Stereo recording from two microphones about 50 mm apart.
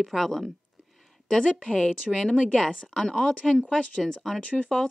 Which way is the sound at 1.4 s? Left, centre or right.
Left.